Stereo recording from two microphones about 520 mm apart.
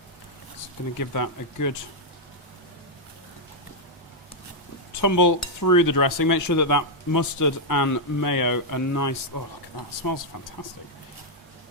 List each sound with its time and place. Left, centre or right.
0.9 s speech: left
4.9 s speech: left